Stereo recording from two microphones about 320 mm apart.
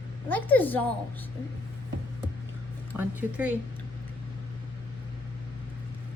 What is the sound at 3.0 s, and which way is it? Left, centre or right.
Speech, centre.